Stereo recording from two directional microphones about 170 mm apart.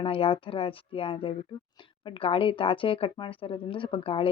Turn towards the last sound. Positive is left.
turn(degrees=30)  # may be behind; listen again after turning